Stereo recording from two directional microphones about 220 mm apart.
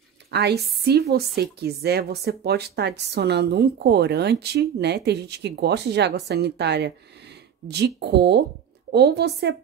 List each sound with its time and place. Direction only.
0.3 s speech: 50° right (ahead or behind)